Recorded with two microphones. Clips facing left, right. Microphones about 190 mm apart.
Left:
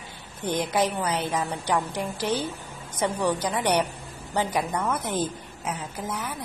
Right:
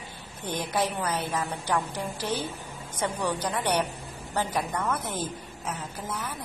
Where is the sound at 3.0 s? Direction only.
10° left (ahead or behind).